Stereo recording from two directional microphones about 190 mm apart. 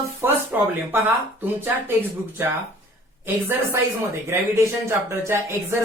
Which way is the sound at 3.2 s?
10° right (ahead or behind).